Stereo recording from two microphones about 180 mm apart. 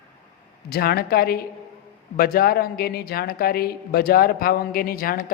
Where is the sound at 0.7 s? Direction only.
60° left (ahead or behind).